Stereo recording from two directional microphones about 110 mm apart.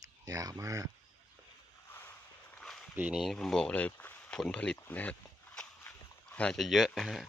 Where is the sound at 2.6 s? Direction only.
Centre (ahead or behind).